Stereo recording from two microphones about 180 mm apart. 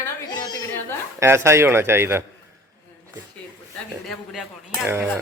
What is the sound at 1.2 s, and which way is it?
Speech, 15° right (ahead or behind).